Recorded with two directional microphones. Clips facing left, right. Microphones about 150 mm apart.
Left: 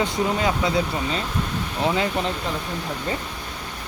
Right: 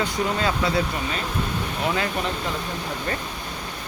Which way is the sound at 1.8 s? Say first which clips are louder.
Left 3 dB; 20° left (ahead or behind).